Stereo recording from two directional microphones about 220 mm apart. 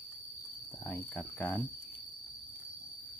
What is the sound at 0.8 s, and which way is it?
Speech, 10° left (ahead or behind).